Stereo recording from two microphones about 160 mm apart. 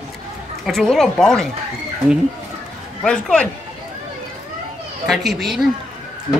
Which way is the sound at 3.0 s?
5° left (ahead or behind).